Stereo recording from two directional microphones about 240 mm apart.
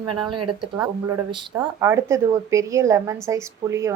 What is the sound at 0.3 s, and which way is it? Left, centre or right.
Speech, right.